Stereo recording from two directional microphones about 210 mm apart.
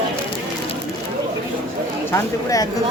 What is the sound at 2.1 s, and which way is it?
Speech, 15° left (ahead or behind).